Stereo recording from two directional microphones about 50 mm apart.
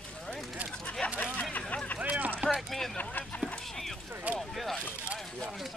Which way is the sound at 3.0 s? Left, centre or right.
Left.